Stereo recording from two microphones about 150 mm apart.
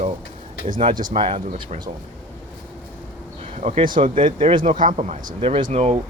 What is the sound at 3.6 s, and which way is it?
Speech, 45° right (ahead or behind).